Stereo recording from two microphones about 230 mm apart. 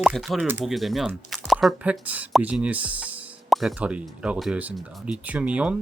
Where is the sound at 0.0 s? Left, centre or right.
Centre.